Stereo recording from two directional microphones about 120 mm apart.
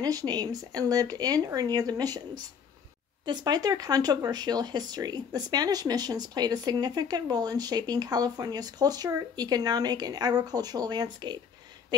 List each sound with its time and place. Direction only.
0.0 s speech: 30° right (ahead or behind)